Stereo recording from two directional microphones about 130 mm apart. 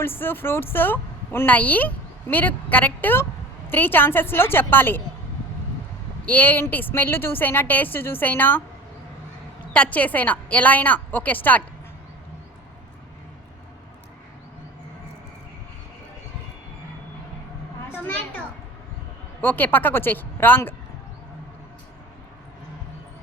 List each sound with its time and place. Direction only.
0.0 s a woman's voice: 15° left (ahead or behind)
6.2 s a woman's voice: 15° left (ahead or behind)
9.7 s a woman's voice: 10° left (ahead or behind)
18.0 s a sound: 10° left (ahead or behind)
19.4 s a woman's voice: 15° left (ahead or behind)